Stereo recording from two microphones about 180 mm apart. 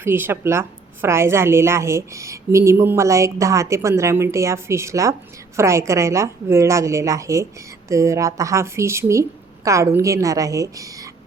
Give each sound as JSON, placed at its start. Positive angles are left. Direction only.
{"t": 0.0, "sound": "a woman's voice", "side_deg": -10}